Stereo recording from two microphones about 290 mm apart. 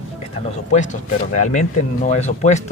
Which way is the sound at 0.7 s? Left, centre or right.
Left.